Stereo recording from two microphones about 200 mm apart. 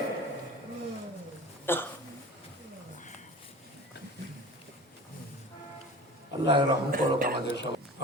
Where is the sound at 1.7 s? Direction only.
10° left (ahead or behind).